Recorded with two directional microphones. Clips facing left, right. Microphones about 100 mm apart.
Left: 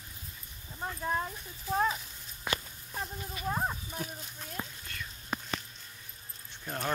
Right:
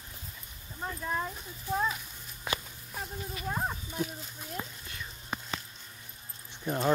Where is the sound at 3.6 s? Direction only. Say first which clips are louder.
Right 2 dB; 5° right (ahead or behind).